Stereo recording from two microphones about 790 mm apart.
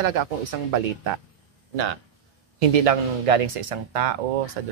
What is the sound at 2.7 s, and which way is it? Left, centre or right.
Speech, right.